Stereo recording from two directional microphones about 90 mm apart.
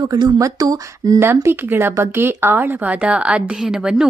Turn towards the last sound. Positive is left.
turn(degrees=-5)  # may be behind; listen again after turning